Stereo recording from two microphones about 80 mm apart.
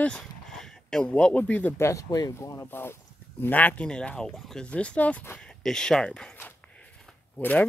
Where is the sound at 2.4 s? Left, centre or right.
Left.